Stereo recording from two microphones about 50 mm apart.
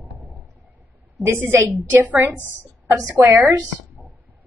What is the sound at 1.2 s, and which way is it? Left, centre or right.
Speech, right.